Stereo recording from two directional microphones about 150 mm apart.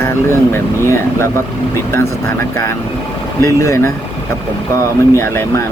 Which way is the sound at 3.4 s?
20° left (ahead or behind).